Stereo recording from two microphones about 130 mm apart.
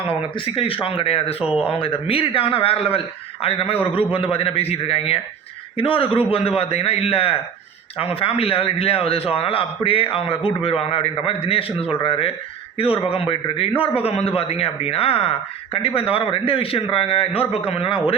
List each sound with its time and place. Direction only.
0.1 s a man's voice: 45° left (ahead or behind)